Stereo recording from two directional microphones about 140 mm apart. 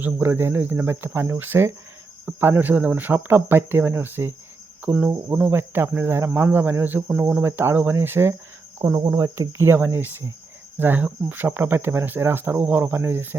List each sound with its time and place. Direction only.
0.0 s speech: 15° right (ahead or behind)
8.8 s speech: 30° right (ahead or behind)